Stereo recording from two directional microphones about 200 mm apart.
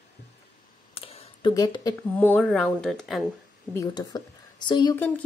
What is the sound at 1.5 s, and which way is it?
Speech, 20° left (ahead or behind).